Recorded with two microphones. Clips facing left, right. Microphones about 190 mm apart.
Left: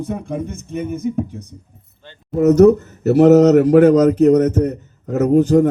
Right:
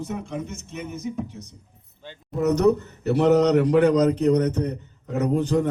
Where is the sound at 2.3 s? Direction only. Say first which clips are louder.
Left 8 dB; centre (ahead or behind).